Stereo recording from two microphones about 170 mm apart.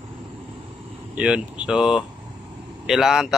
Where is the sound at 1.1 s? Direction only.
5° right (ahead or behind).